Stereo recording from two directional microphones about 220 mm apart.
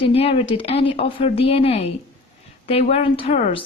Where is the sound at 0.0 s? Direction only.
25° left (ahead or behind).